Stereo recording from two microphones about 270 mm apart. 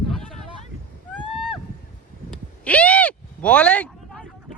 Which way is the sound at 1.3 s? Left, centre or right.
Centre.